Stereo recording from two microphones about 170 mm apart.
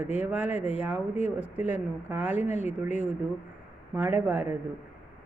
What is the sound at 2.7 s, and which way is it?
Speech, 45° left (ahead or behind).